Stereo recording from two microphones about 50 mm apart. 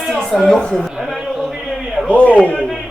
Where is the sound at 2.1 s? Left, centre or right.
Left.